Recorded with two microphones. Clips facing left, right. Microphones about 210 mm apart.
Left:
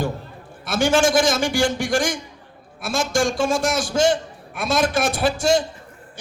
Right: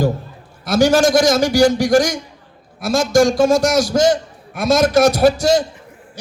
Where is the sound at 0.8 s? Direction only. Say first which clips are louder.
Right 5 dB; 40° right (ahead or behind).